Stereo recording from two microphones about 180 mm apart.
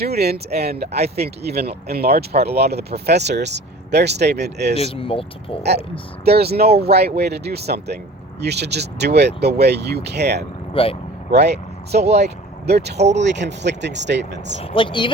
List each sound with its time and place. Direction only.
0.0 s speech: 60° right (ahead or behind)
4.8 s speech: 30° left (ahead or behind)
6.2 s speech: 60° right (ahead or behind)
10.8 s speech: 30° left (ahead or behind)
11.3 s speech: 65° right (ahead or behind)
14.6 s speech: 30° left (ahead or behind)